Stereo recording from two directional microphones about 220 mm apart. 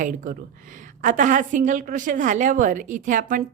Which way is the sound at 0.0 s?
35° right (ahead or behind).